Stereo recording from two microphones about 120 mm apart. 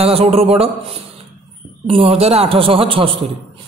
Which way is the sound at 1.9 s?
55° right (ahead or behind).